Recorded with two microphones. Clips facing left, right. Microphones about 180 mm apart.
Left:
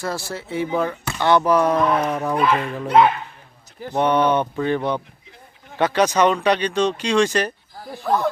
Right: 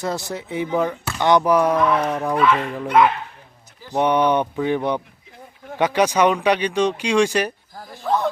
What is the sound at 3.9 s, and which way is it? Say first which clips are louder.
Speech: even; 15° right (ahead or behind).